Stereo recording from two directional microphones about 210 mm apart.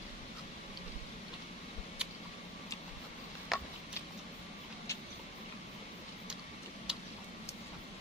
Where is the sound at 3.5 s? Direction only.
Centre (ahead or behind).